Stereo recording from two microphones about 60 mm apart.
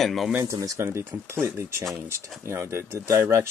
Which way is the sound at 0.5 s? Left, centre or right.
Right.